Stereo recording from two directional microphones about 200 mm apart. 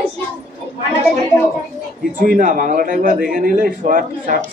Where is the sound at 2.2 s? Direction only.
40° right (ahead or behind).